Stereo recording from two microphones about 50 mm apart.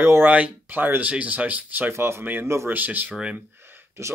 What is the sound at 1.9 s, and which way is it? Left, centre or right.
Speech, right.